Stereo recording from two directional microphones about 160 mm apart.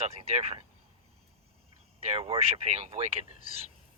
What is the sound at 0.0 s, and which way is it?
Speech, 45° right (ahead or behind).